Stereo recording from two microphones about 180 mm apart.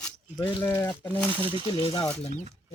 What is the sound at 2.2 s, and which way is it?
Speech, 40° left (ahead or behind).